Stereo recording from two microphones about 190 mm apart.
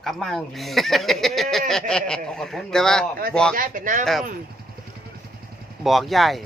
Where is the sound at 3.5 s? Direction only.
45° right (ahead or behind).